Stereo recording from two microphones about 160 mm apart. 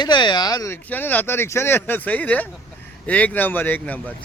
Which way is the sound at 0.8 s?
10° left (ahead or behind).